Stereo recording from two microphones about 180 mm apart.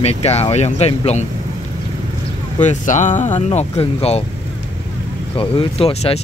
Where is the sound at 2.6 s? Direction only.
45° left (ahead or behind).